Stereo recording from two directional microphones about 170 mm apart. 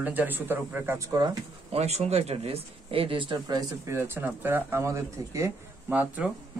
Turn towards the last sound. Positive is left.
turn(degrees=-10)  # may be behind; listen again after turning